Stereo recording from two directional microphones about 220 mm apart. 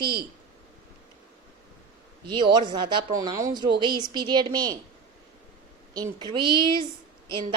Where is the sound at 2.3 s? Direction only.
20° right (ahead or behind).